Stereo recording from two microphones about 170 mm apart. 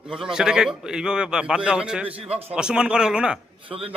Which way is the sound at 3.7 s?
35° right (ahead or behind).